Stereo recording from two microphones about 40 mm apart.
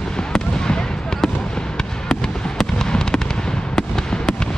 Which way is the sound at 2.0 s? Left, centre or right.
Centre.